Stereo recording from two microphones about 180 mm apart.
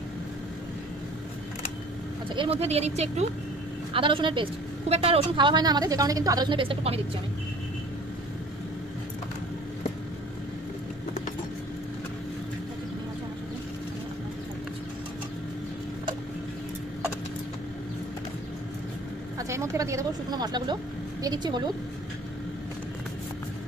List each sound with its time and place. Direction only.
2.3 s a woman's voice: 30° right (ahead or behind)
19.3 s a sound: 15° right (ahead or behind)
21.2 s a woman's voice: 25° right (ahead or behind)